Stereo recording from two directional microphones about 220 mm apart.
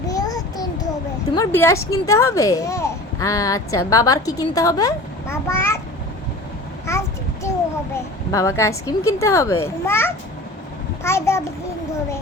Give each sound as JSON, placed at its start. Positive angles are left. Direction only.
{"t": 0.1, "sound": "child singing", "side_deg": 15}
{"t": 1.4, "sound": "speech", "side_deg": 10}
{"t": 6.9, "sound": "a sound", "side_deg": 15}
{"t": 8.3, "sound": "speech", "side_deg": 15}